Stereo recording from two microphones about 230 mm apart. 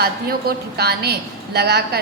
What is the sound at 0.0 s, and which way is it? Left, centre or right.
A woman's voice, right.